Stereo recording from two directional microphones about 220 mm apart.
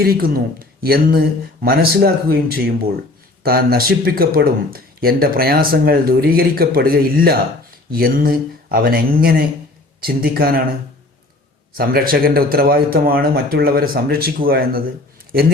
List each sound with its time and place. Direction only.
0.0 s speech: 45° right (ahead or behind)
11.8 s speech: 40° right (ahead or behind)